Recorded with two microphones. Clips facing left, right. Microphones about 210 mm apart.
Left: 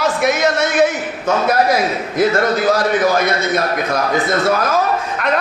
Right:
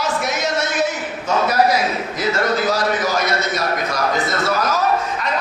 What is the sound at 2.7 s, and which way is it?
A man's voice, 55° left (ahead or behind).